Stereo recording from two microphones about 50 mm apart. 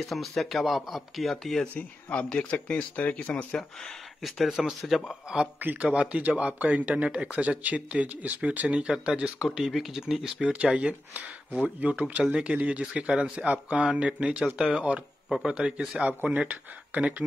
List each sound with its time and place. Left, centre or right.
0.0 s speech: centre
1.7 s speech: left
4.2 s speech: centre
5.8 s speech: right
9.5 s speech: centre
10.5 s speech: right
16.1 s speech: right